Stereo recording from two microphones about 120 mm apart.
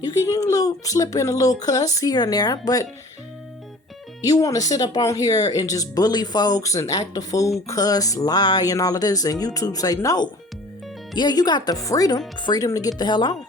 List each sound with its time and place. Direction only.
0.3 s speech: 30° left (ahead or behind)
4.2 s speech: 30° left (ahead or behind)